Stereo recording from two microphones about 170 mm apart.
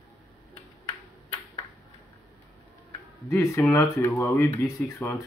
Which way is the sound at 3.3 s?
15° left (ahead or behind).